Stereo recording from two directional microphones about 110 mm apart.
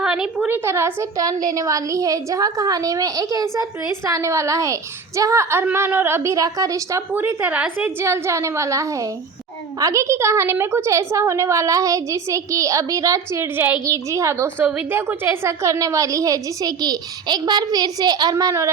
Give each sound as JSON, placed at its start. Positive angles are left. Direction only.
{"t": 0.0, "sound": "a sound", "side_deg": -10}
{"t": 0.5, "sound": "a woman's voice", "side_deg": -25}
{"t": 7.1, "sound": "a woman's voice", "side_deg": -20}